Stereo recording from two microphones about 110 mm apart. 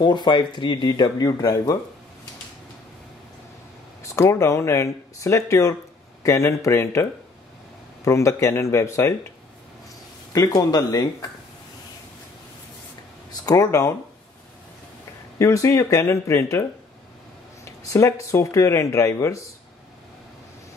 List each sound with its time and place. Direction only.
0.0 s speech: 45° left (ahead or behind)
4.1 s speech: 25° left (ahead or behind)
10.3 s speech: 35° left (ahead or behind)
13.5 s speech: 30° left (ahead or behind)
15.3 s speech: 25° left (ahead or behind)
17.8 s speech: 30° left (ahead or behind)